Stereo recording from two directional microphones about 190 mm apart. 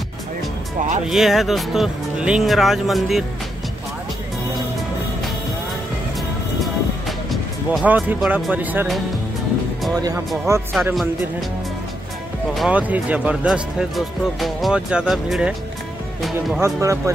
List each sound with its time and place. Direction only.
1.0 s speech: centre (ahead or behind)
6.6 s music: centre (ahead or behind)
9.9 s speech: 15° right (ahead or behind)
12.5 s speech: 5° right (ahead or behind)
16.6 s speech: 15° right (ahead or behind)